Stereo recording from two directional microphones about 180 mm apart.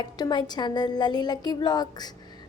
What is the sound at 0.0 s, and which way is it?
A woman's voice, 25° left (ahead or behind).